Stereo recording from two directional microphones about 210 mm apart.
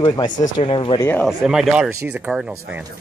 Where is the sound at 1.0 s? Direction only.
10° left (ahead or behind).